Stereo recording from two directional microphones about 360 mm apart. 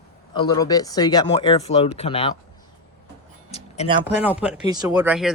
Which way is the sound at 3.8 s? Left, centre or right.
Centre.